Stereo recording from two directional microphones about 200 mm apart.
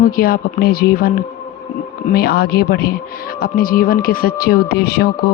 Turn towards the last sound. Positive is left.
turn(degrees=50)  # may be behind; listen again after turning